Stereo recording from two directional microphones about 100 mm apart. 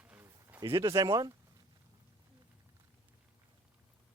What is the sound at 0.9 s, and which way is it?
Speech, 40° right (ahead or behind).